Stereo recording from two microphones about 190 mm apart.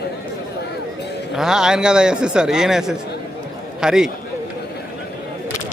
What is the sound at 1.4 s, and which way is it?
A man's voice, 5° right (ahead or behind).